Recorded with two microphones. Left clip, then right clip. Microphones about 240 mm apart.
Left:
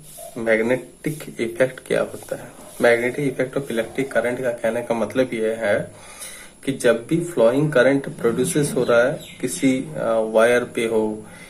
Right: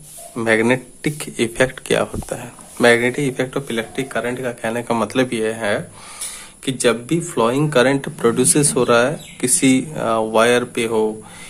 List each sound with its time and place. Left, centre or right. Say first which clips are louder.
0.3 s speech: right 3 dB; right
7.3 s speech: even; right